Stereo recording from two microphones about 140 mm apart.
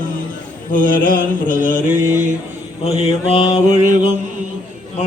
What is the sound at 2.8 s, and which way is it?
Mantra, 50° left (ahead or behind).